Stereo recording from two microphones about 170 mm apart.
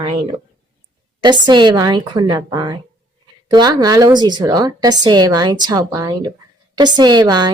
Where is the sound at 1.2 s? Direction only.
25° right (ahead or behind).